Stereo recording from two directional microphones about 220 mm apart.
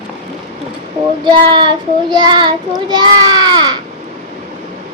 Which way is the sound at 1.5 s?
20° right (ahead or behind).